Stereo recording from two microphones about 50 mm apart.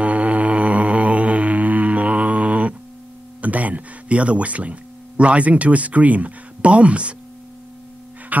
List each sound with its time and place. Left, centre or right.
0.0 s a sound: right
3.3 s speech: right
8.3 s music: right